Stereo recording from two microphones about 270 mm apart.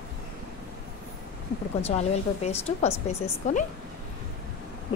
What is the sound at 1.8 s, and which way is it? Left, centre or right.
A woman's voice, left.